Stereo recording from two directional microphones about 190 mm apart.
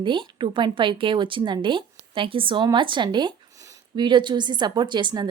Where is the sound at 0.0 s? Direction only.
25° right (ahead or behind).